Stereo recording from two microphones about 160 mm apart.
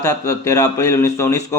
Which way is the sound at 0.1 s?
20° left (ahead or behind).